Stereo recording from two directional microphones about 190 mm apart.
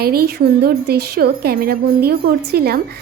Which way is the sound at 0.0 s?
55° right (ahead or behind).